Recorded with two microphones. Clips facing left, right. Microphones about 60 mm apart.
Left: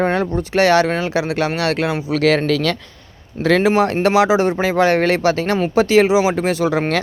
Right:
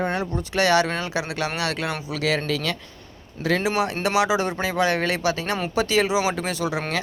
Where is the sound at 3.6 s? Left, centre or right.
Left.